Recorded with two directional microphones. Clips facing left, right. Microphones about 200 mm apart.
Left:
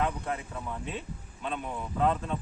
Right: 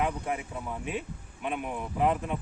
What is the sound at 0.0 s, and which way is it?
A man's voice, 15° right (ahead or behind).